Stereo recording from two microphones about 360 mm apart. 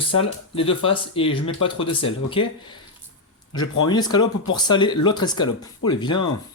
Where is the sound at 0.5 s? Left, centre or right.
Centre.